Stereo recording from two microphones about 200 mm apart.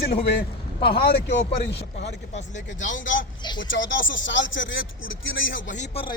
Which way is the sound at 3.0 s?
75° left (ahead or behind).